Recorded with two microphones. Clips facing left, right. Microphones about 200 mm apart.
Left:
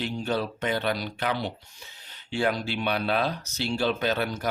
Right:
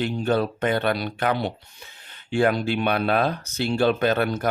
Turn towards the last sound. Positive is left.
turn(degrees=-55)  # may be behind; listen again after turning